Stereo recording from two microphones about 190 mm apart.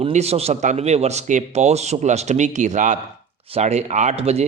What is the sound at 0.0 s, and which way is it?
A man's voice, 35° right (ahead or behind).